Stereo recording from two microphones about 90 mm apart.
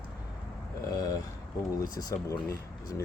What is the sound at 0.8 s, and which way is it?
Speech, 45° left (ahead or behind).